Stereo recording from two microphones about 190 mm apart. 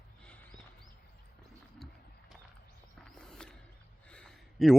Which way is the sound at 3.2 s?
5° left (ahead or behind).